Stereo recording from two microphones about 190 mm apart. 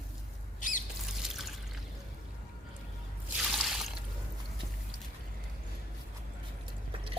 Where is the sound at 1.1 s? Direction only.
Centre (ahead or behind).